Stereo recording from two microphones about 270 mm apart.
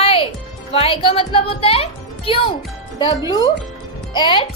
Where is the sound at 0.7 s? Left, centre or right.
Left.